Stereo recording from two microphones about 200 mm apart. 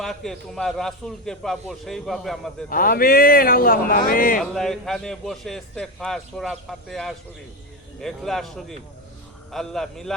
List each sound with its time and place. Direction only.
0.0 s a man's voice: centre (ahead or behind)
2.6 s speech: 45° left (ahead or behind)
4.5 s a man's voice: centre (ahead or behind)